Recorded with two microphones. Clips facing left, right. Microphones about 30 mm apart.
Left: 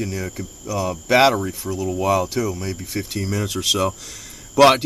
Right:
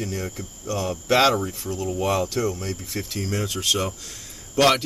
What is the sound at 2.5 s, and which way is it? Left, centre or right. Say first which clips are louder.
Speech: left 3 dB; centre.